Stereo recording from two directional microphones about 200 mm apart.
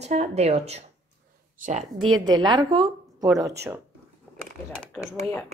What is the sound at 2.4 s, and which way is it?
Speech, 20° right (ahead or behind).